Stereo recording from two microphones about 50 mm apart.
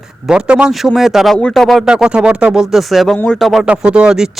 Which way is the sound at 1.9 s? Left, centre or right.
Centre.